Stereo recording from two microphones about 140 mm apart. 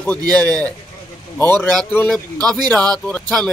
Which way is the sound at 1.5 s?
10° left (ahead or behind).